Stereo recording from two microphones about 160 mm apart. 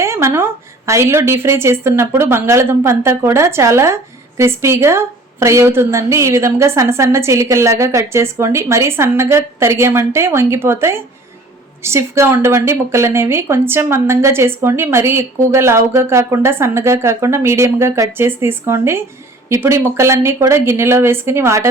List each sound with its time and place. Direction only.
0.0 s a woman's voice: 15° right (ahead or behind)